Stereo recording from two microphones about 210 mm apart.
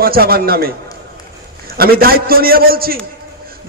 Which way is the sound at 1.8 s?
45° right (ahead or behind).